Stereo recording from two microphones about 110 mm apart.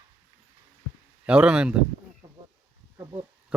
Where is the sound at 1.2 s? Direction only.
10° right (ahead or behind).